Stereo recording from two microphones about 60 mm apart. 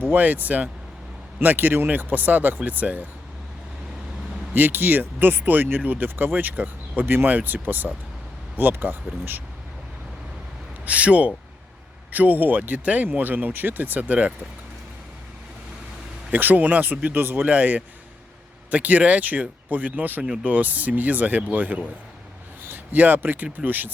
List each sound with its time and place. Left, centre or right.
0.0 s speech: right
4.5 s speech: right
10.8 s speech: right
16.3 s speech: right
17.4 s speech: right